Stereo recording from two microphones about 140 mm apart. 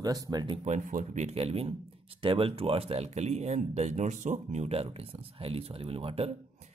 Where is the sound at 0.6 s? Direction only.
65° right (ahead or behind).